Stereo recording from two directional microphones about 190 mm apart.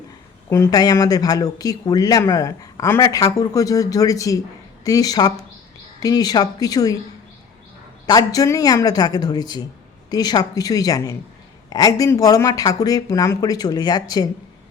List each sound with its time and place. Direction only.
0.5 s speech: 15° left (ahead or behind)
8.0 s speech: 20° left (ahead or behind)